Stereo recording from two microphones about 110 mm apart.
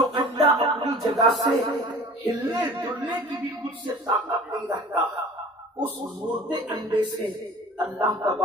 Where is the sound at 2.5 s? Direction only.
45° right (ahead or behind).